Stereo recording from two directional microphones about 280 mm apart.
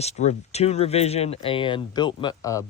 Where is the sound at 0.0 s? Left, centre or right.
Left.